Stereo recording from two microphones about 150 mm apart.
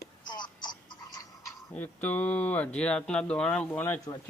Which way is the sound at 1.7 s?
10° left (ahead or behind).